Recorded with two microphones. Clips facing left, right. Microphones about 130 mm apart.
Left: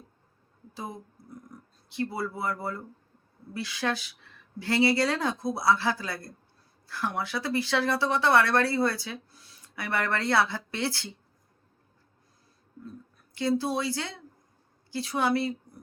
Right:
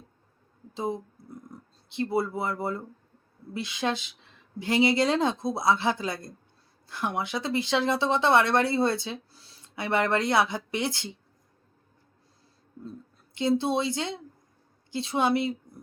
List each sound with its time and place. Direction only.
0.7 s speech: 25° right (ahead or behind)
1.5 s a sound: 25° right (ahead or behind)
1.9 s speech: 20° right (ahead or behind)
13.3 s speech: 20° right (ahead or behind)